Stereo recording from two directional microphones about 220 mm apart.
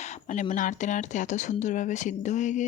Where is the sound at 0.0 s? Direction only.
35° left (ahead or behind).